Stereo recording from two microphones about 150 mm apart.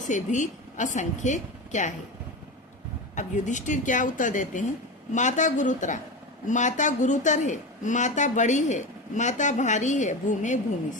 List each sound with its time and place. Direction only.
0.1 s a woman's voice: 55° left (ahead or behind)
3.2 s a woman's voice: 55° left (ahead or behind)